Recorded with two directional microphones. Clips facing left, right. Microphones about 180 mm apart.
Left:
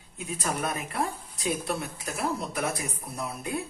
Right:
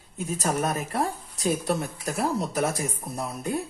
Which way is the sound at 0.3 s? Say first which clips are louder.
Right 4 dB; 40° right (ahead or behind).